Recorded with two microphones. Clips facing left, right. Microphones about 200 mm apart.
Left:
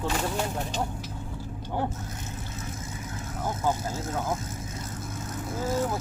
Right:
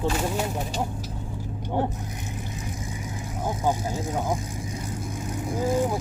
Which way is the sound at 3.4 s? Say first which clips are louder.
Right 2 dB; 15° right (ahead or behind).